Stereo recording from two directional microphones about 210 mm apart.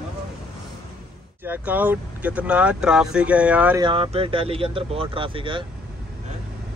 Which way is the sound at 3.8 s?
25° right (ahead or behind).